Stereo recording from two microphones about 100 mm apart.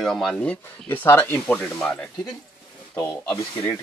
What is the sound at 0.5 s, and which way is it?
Speech, 15° left (ahead or behind).